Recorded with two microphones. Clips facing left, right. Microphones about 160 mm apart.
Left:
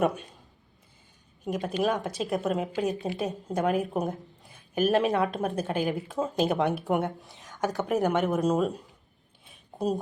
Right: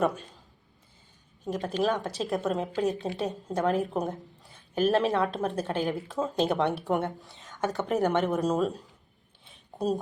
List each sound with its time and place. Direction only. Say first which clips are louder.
0.0 s speech: left 1 dB; 20° left (ahead or behind)
1.5 s a woman's voice: even; 10° left (ahead or behind)